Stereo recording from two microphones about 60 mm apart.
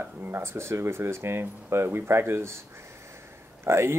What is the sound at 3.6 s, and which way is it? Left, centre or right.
Speech, right.